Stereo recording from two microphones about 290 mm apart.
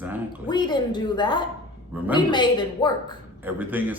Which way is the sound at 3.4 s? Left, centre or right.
Centre.